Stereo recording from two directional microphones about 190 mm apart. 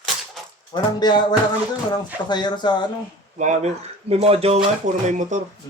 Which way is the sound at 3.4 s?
35° right (ahead or behind).